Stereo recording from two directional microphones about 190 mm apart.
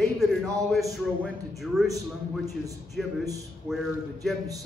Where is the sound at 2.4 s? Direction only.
15° right (ahead or behind).